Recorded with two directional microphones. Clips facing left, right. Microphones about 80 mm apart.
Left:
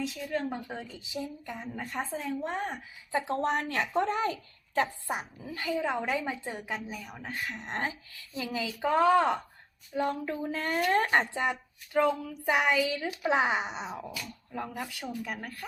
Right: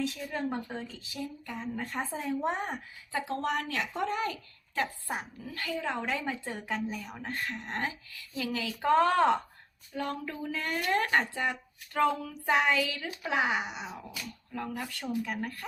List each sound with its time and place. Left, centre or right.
0.3 s speech: centre
0.9 s a woman's voice: centre
1.7 s speech: centre
2.2 s speech: centre
3.2 s a woman's voice: left; by 7.5 s centre
7.5 s a woman's voice: left
8.4 s a woman's voice: centre
8.8 s speech: centre
9.9 s a woman's voice: centre
11.9 s a woman's voice: centre; by 14.0 s left
14.7 s speech: centre